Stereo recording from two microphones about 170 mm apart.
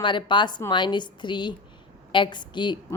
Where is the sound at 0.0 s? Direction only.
30° left (ahead or behind).